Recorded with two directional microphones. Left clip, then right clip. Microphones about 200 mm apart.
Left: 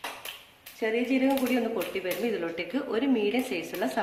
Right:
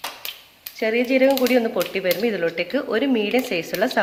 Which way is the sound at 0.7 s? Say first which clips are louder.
Right 8 dB; 45° right (ahead or behind).